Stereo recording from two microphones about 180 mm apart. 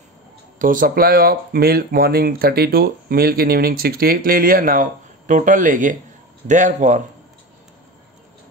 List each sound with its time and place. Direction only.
0.6 s speech: 50° right (ahead or behind)